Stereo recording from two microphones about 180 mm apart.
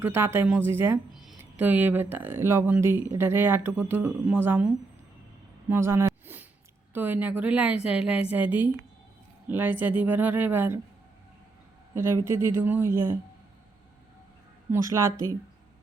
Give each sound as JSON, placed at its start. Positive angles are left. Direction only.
{"t": 0.0, "sound": "speech", "side_deg": -15}
{"t": 1.1, "sound": "speech", "side_deg": 0}
{"t": 5.6, "sound": "a sound", "side_deg": -15}
{"t": 6.9, "sound": "speech", "side_deg": -10}
{"t": 11.9, "sound": "speech", "side_deg": -15}
{"t": 14.7, "sound": "speech", "side_deg": -15}